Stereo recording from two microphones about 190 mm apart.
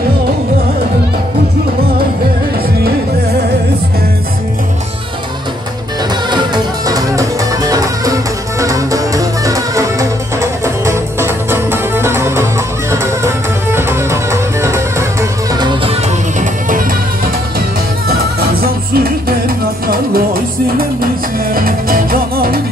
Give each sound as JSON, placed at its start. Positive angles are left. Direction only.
{"t": 6.3, "sound": "music", "side_deg": -20}
{"t": 16.3, "sound": "music", "side_deg": -45}
{"t": 18.6, "sound": "music", "side_deg": -50}
{"t": 21.5, "sound": "music", "side_deg": -50}